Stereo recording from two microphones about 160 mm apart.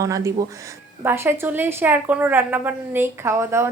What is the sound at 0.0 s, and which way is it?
A woman's voice, 20° right (ahead or behind).